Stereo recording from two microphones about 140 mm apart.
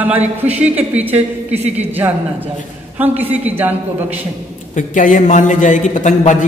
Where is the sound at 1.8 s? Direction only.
15° right (ahead or behind).